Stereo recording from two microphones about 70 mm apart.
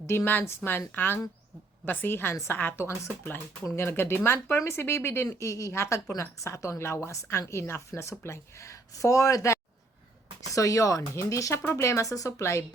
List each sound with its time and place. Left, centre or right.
0.4 s a woman's voice: left
11.6 s a woman's voice: left